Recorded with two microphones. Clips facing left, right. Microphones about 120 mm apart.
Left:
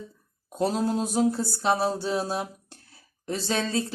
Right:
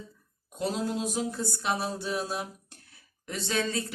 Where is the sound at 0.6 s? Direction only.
40° left (ahead or behind).